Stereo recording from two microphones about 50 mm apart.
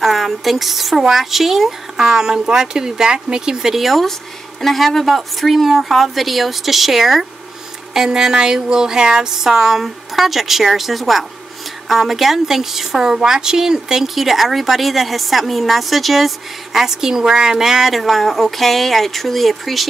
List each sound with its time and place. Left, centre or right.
0.0 s a woman's voice: centre